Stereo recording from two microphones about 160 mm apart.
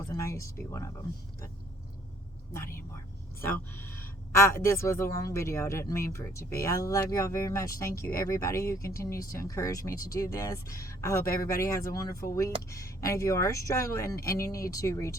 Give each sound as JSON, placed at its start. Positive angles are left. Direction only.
{"t": 0.0, "sound": "speech", "side_deg": 20}
{"t": 3.4, "sound": "speech", "side_deg": 15}
{"t": 12.0, "sound": "speech", "side_deg": 65}
{"t": 12.3, "sound": "speech", "side_deg": 20}